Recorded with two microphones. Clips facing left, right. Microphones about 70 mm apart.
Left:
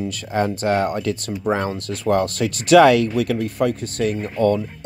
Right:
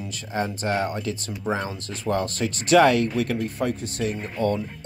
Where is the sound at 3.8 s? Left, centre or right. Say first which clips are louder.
Left 5 dB; left.